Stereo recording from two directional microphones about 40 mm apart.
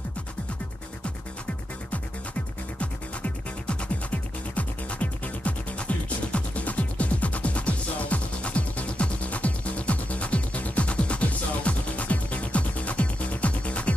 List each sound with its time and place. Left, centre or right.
2.8 s music: left